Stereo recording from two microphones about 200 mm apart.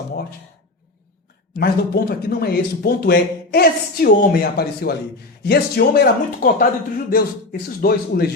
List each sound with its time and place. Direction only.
1.5 s speech: 50° left (ahead or behind)